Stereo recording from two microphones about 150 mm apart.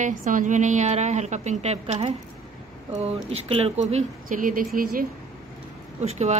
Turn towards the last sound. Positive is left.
turn(degrees=-45)  # may be behind; listen again after turning